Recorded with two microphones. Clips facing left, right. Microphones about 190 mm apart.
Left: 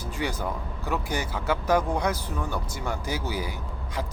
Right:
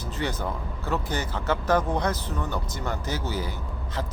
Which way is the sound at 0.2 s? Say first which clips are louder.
Even; 10° left (ahead or behind).